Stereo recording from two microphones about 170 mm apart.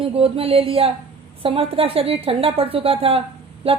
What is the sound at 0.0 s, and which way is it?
Speech, 35° right (ahead or behind).